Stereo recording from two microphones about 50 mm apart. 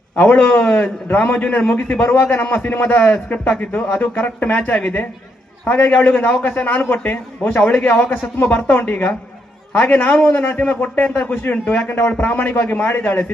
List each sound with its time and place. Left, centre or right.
0.2 s a man's voice: left
11.9 s speech: left
12.5 s a man's voice: left